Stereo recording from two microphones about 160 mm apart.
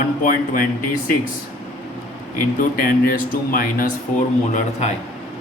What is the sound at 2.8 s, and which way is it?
Speech, 60° left (ahead or behind).